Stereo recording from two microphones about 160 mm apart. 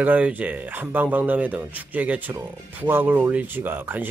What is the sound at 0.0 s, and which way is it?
Speech, 10° right (ahead or behind).